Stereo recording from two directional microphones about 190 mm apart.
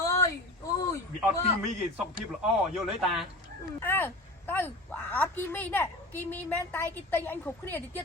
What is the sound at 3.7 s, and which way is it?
A woman's voice, 10° left (ahead or behind).